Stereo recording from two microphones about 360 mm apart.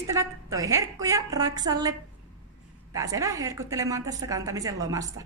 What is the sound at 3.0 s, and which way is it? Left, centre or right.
A woman's voice, centre.